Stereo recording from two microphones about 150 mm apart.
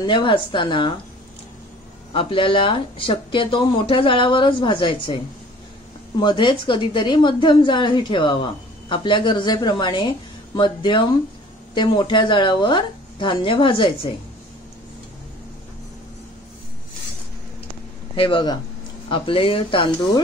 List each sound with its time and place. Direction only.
0.0 s a woman's voice: 30° left (ahead or behind)
2.1 s a woman's voice: 35° left (ahead or behind)
18.1 s a woman's voice: 35° left (ahead or behind)